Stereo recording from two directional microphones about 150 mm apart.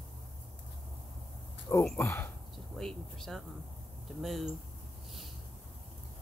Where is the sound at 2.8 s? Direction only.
Centre (ahead or behind).